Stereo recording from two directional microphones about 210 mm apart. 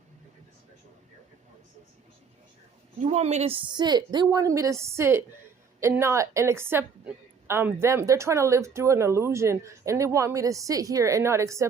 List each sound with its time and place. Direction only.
3.0 s a woman's voice: 30° right (ahead or behind); by 11.6 s 15° right (ahead or behind)